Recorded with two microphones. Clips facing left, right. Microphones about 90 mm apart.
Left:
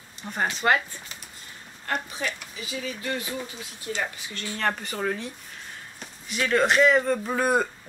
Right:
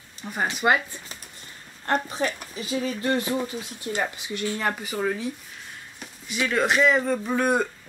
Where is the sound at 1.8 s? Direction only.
35° right (ahead or behind).